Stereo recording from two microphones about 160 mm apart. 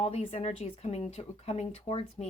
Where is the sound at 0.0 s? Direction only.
40° left (ahead or behind).